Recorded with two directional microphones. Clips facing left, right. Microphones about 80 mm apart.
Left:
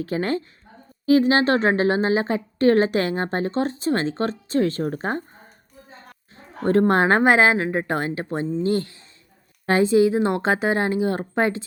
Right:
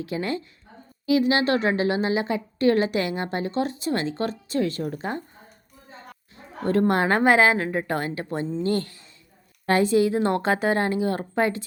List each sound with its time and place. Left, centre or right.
0.0 s a woman's voice: left
6.3 s a woman's voice: left